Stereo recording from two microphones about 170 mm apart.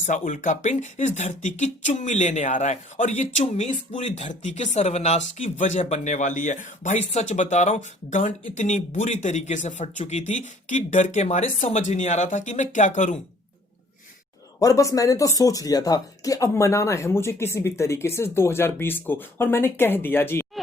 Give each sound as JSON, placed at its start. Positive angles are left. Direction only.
{"t": 0.0, "sound": "speech", "side_deg": 45}
{"t": 14.6, "sound": "speech", "side_deg": 20}